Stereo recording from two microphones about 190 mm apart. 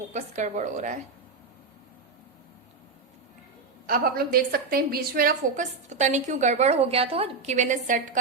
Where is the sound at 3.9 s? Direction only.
50° right (ahead or behind).